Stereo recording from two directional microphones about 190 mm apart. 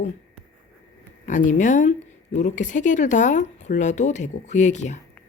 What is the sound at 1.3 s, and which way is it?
A woman's voice, 40° left (ahead or behind).